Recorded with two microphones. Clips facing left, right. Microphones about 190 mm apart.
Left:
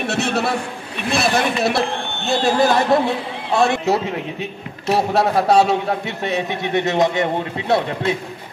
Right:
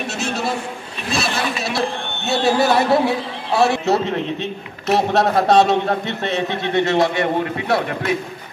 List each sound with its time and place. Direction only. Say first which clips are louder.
0.0 s a sound: left 4 dB; 60° left (ahead or behind)
1.1 s speech: left 4 dB; 55° left (ahead or behind)
2.2 s speech: even; 10° right (ahead or behind)
3.8 s a man's voice: right 1 dB; 10° left (ahead or behind)